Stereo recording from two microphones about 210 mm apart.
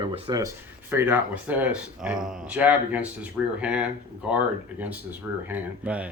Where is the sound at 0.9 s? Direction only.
10° right (ahead or behind).